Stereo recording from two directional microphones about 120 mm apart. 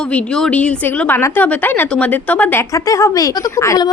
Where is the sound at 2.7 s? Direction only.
25° left (ahead or behind).